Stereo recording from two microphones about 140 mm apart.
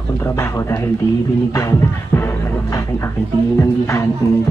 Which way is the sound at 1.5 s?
20° left (ahead or behind).